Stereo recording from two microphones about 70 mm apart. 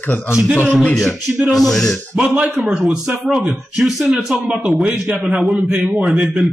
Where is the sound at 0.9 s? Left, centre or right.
Centre.